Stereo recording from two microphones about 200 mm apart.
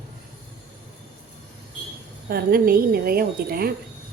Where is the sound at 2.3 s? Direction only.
50° right (ahead or behind).